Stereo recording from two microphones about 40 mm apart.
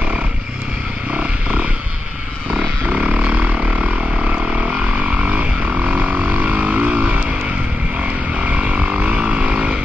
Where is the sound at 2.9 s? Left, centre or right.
Right.